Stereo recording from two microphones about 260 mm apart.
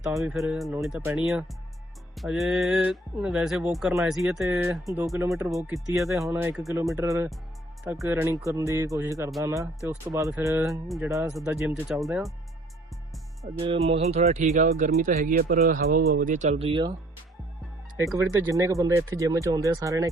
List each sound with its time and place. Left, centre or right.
0.0 s speech: centre
6.9 s speech: centre
10.7 s speech: centre
13.4 s speech: right
17.9 s speech: centre